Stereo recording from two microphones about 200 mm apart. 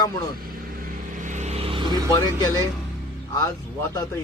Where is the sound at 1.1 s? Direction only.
40° right (ahead or behind); by 2.4 s 25° right (ahead or behind).